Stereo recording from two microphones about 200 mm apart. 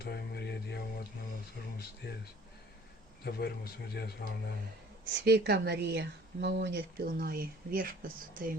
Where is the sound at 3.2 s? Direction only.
50° left (ahead or behind).